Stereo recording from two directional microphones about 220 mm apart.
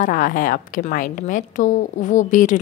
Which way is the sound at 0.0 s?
35° left (ahead or behind).